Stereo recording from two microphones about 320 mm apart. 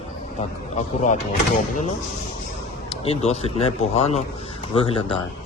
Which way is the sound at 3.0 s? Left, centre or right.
Centre.